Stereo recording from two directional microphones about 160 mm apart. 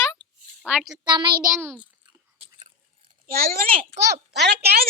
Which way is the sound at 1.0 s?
30° right (ahead or behind).